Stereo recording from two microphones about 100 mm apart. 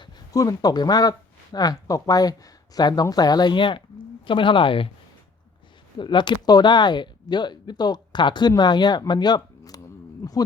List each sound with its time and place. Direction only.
0.3 s speech: 40° left (ahead or behind); by 4.9 s 60° left (ahead or behind)
6.0 s speech: 50° left (ahead or behind)